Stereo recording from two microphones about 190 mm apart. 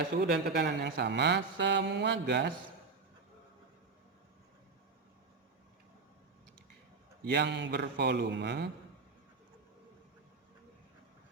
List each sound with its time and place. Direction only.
0.2 s speech: 60° right (ahead or behind)
7.3 s speech: 65° right (ahead or behind)